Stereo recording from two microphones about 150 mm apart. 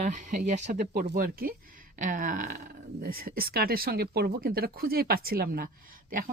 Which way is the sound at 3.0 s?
75° right (ahead or behind).